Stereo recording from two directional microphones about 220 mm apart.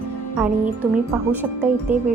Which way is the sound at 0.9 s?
10° right (ahead or behind).